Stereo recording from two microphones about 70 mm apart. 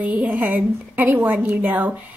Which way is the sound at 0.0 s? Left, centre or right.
Right.